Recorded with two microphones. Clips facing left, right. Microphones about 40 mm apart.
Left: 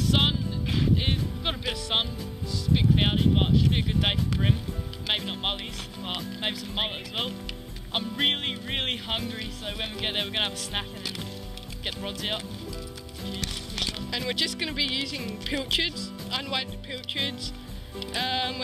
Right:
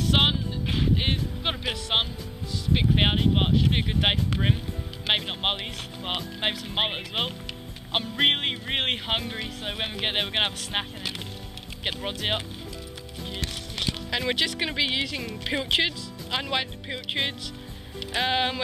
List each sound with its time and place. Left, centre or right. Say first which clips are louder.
0.0 s music: right 2 dB; right
2.7 s speech: right 1 dB; right
13.7 s speech: right 2 dB; centre
14.1 s speech: right 4 dB; right